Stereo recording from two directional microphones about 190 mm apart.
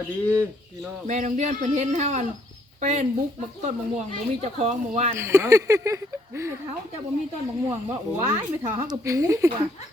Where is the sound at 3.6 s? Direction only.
35° right (ahead or behind).